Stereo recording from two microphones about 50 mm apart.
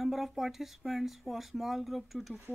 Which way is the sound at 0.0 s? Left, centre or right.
Centre.